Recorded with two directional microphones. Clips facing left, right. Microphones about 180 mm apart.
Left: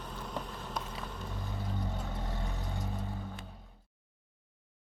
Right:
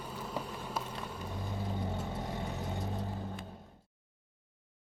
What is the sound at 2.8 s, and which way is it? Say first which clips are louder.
Vehicle: right 2 dB; 35° right (ahead or behind).